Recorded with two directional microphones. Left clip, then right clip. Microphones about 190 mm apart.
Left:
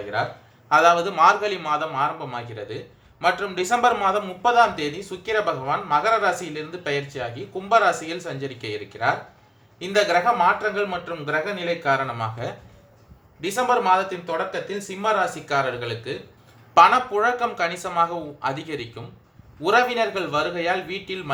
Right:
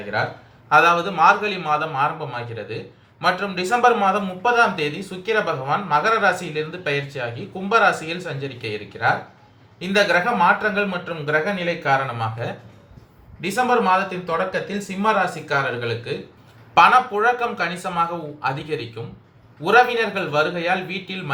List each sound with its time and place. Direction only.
0.7 s a man's voice: 40° left (ahead or behind)